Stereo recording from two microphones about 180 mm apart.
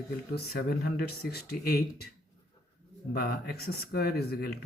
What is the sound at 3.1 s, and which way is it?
Speech, 60° left (ahead or behind).